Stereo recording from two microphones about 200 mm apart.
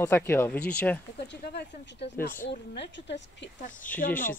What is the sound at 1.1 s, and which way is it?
Speech, 55° left (ahead or behind).